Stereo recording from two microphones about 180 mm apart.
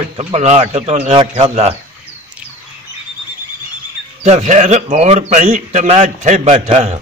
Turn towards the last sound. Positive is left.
turn(degrees=-40)  # may be behind; listen again after turning